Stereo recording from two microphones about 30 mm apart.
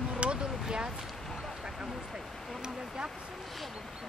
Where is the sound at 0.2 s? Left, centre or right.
Right.